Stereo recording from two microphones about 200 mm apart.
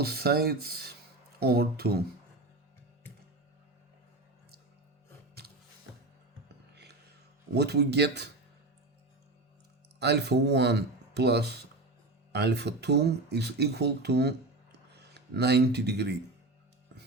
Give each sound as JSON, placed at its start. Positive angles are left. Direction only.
{"t": 0.0, "sound": "speech", "side_deg": -50}
{"t": 7.5, "sound": "speech", "side_deg": -55}
{"t": 10.0, "sound": "speech", "side_deg": -55}